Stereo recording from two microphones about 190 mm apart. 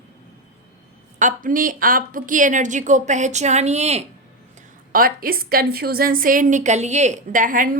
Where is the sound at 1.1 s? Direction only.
45° right (ahead or behind).